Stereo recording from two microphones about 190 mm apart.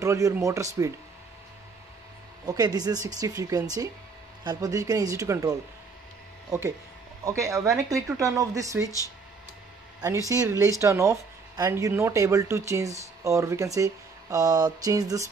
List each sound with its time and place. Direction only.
0.0 s speech: 15° right (ahead or behind)
2.4 s speech: 20° right (ahead or behind)
7.2 s speech: 15° right (ahead or behind)
10.0 s speech: 15° right (ahead or behind)